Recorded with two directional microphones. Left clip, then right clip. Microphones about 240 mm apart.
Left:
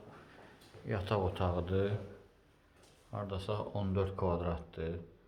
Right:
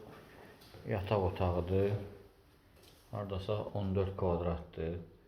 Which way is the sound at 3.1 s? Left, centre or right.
Centre.